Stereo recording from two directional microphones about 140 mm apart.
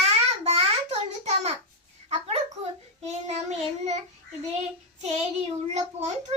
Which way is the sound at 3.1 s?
50° right (ahead or behind).